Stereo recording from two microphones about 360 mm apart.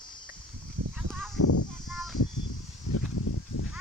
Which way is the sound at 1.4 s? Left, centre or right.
Left.